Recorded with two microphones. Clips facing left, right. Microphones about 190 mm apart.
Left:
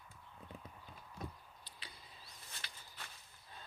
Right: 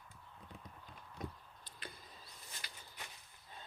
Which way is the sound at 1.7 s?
50° right (ahead or behind).